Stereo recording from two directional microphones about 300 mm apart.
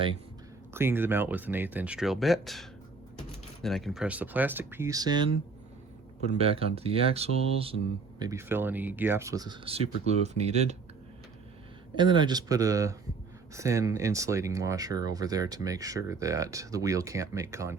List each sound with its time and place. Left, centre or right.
0.7 s speech: centre
6.3 s speech: centre
11.9 s speech: centre